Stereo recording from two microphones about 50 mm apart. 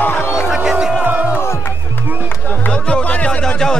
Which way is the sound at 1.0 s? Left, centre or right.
Right.